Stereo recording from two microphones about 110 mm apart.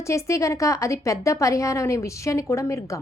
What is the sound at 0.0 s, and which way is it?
A woman's voice, 25° left (ahead or behind).